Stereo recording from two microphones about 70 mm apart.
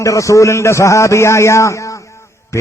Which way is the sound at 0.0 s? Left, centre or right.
Left.